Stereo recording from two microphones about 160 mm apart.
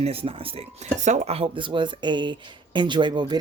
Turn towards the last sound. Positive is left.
turn(degrees=-30)  # may be behind; listen again after turning